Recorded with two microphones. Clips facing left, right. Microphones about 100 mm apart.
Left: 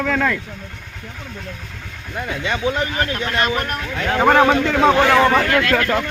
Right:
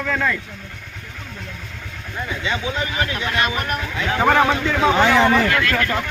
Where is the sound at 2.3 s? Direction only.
60° left (ahead or behind); by 3.4 s 40° left (ahead or behind).